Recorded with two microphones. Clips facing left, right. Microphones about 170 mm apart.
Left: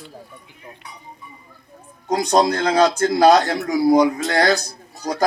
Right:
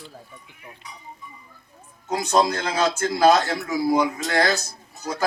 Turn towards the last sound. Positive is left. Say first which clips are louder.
# left 5 dB
turn(degrees=40)  # may be behind; listen again after turning